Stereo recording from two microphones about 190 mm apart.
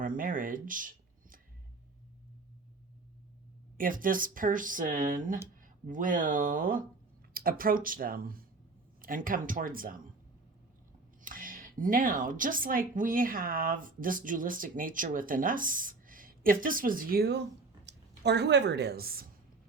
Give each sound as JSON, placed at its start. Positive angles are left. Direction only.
{"t": 0.0, "sound": "speech", "side_deg": -45}
{"t": 3.8, "sound": "speech", "side_deg": -45}
{"t": 11.2, "sound": "speech", "side_deg": -45}